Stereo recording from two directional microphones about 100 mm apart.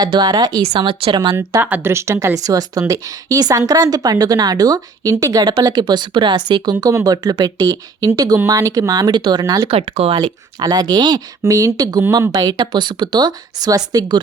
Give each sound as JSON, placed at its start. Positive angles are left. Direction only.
{"t": 0.0, "sound": "speech", "side_deg": -45}
{"t": 0.7, "sound": "speech", "side_deg": -60}
{"t": 1.6, "sound": "a woman's voice", "side_deg": -20}
{"t": 9.6, "sound": "speech", "side_deg": -85}
{"t": 10.2, "sound": "speech", "side_deg": -45}